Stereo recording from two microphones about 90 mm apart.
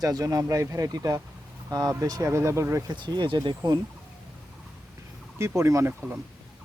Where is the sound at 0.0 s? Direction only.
45° right (ahead or behind).